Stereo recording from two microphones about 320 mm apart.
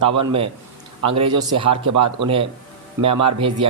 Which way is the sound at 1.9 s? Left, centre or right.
Right.